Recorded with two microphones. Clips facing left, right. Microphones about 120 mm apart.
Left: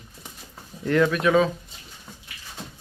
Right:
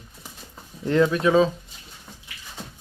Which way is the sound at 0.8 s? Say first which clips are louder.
Right 1 dB; 25° right (ahead or behind).